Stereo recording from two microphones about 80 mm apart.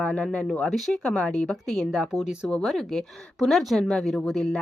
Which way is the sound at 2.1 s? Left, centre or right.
Centre.